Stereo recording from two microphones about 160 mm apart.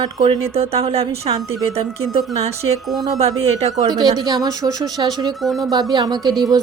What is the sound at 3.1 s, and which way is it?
Speech, 40° right (ahead or behind).